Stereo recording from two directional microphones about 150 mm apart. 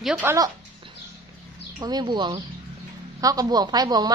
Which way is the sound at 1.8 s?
30° right (ahead or behind).